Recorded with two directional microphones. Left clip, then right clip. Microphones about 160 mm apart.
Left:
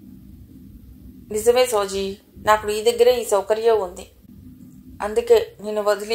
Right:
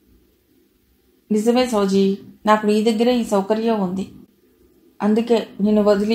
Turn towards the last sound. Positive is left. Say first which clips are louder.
# right 5 dB
turn(degrees=40)  # may be behind; listen again after turning